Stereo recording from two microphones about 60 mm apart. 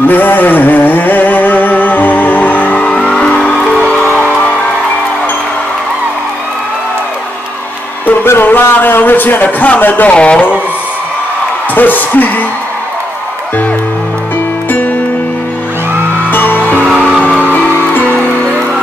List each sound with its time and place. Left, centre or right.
0.1 s music: left
3.1 s music: centre
4.1 s music: centre
8.3 s speech: left
10.1 s speech: centre
11.7 s speech: left
16.3 s music: left